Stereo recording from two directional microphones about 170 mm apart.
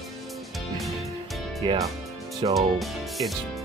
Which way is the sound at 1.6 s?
30° right (ahead or behind).